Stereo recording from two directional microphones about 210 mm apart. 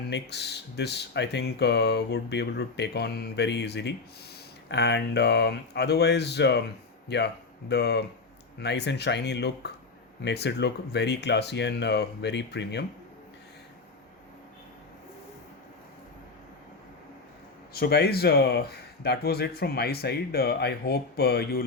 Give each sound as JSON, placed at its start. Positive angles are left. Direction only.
{"t": 0.1, "sound": "speech", "side_deg": 55}
{"t": 17.7, "sound": "speech", "side_deg": 50}